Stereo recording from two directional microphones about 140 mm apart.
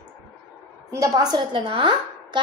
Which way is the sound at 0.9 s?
25° right (ahead or behind).